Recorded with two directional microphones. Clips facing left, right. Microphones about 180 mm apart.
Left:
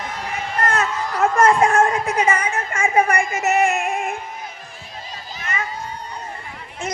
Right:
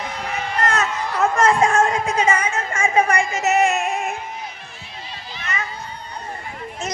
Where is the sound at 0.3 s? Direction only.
50° left (ahead or behind).